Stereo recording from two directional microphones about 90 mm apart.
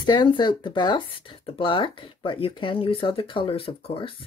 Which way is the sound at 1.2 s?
90° left.